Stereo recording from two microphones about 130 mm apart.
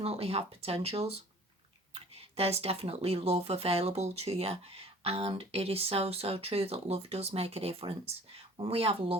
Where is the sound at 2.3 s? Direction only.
50° right (ahead or behind).